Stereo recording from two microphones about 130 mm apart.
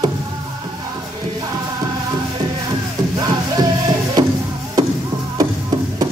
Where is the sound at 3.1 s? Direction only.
30° right (ahead or behind).